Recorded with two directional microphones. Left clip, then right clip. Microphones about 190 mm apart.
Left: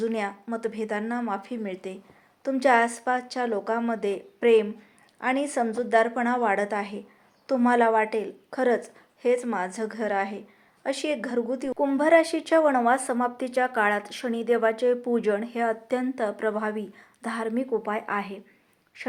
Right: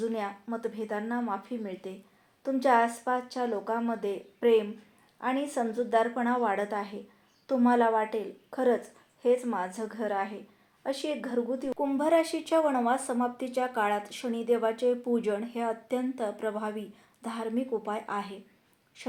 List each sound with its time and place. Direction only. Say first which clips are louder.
0.0 s a woman's voice: left 4 dB; 20° left (ahead or behind)
11.7 s a woman's voice: left 6 dB; 10° left (ahead or behind)